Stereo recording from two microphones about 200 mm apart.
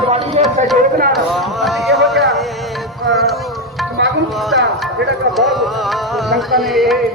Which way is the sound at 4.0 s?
65° right (ahead or behind).